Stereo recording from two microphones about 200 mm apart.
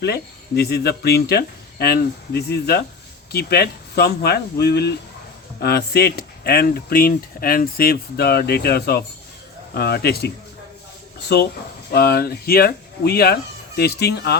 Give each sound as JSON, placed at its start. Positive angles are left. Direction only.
{"t": 0.0, "sound": "speech", "side_deg": 55}
{"t": 11.9, "sound": "speech", "side_deg": 50}